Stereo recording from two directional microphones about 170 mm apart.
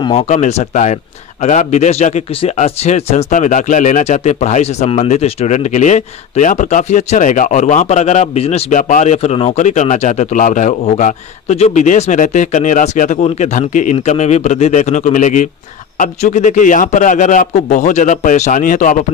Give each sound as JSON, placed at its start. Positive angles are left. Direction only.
{"t": 0.0, "sound": "speech", "side_deg": 35}